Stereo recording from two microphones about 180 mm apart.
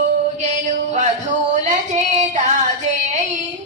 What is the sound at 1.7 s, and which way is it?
Child singing, 40° right (ahead or behind).